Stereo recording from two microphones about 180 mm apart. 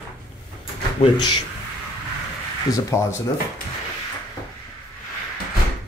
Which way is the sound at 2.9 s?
15° left (ahead or behind).